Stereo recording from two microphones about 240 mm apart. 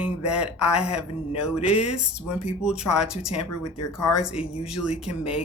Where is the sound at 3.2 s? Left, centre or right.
Left.